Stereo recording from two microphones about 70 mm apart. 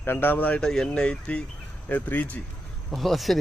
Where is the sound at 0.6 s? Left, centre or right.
Centre; by 2.4 s left.